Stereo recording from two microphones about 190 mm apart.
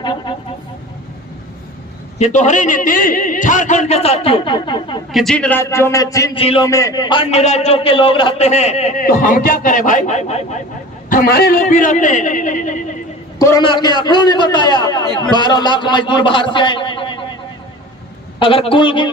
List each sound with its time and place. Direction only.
0.0 s vehicle: 25° left (ahead or behind)
2.1 s a man's voice: 40° left (ahead or behind)
5.1 s speech: 5° left (ahead or behind)
6.3 s a man's voice: 30° left (ahead or behind)
6.7 s a man's voice: 15° left (ahead or behind); by 10.6 s 35° left (ahead or behind)
11.1 s a man's voice: 55° left (ahead or behind)
13.4 s a man's voice: 15° left (ahead or behind)
18.3 s a man's voice: 30° left (ahead or behind)